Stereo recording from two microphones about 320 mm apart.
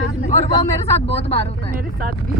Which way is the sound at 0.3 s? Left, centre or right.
Left.